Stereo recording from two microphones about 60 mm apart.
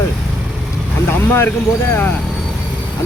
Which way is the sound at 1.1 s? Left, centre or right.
Left.